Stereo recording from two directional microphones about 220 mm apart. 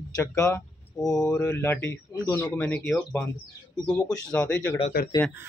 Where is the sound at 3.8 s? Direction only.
15° left (ahead or behind).